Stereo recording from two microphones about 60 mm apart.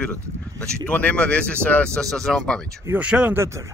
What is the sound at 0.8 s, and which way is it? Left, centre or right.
Speech, left.